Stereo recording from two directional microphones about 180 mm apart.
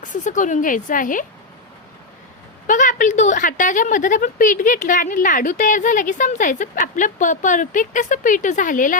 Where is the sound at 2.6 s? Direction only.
45° left (ahead or behind).